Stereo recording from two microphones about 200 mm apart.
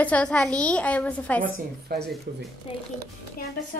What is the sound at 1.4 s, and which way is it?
Speech, 50° right (ahead or behind).